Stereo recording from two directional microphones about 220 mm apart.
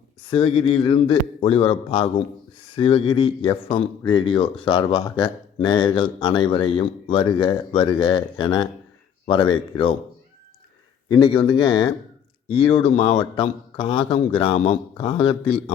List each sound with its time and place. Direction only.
0.3 s speech: 25° left (ahead or behind)
11.1 s speech: 20° left (ahead or behind)